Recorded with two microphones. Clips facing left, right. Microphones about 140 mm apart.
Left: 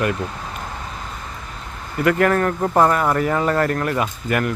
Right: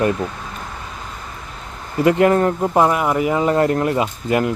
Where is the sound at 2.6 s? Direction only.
10° right (ahead or behind).